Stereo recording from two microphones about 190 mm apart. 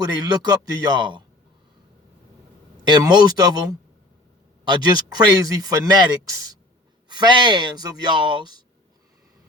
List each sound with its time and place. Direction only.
0.0 s a man's voice: 20° right (ahead or behind)
2.8 s a man's voice: 20° right (ahead or behind)
7.1 s a man's voice: 25° right (ahead or behind)